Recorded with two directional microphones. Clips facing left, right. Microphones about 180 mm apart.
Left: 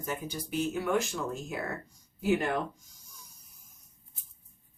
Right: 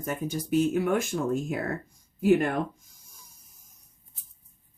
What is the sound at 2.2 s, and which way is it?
Speech, 50° right (ahead or behind).